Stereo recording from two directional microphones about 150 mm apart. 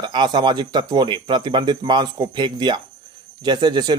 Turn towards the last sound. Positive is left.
turn(degrees=-30)  # may be behind; listen again after turning